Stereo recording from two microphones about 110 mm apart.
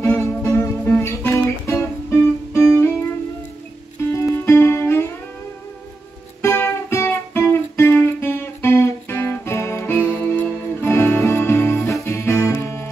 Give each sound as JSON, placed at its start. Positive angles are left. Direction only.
{"t": 0.4, "sound": "music", "side_deg": 25}
{"t": 4.1, "sound": "music", "side_deg": 25}
{"t": 6.4, "sound": "music", "side_deg": 25}